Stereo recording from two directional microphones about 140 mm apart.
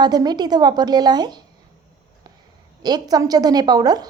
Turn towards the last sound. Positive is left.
turn(degrees=-30)  # may be behind; listen again after turning